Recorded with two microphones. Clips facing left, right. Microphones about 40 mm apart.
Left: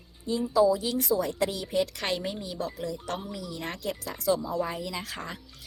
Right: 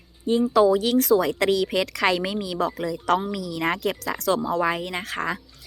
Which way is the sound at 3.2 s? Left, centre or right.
Right.